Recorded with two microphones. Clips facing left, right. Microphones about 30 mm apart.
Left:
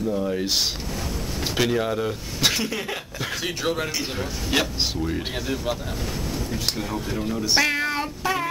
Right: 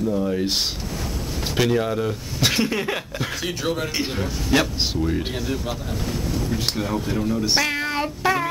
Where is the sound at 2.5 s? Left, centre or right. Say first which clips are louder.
Right 4 dB; right.